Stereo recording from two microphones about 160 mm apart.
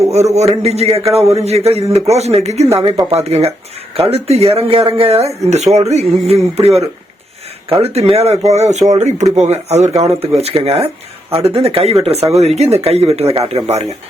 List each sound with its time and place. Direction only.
0.3 s speech: 40° right (ahead or behind)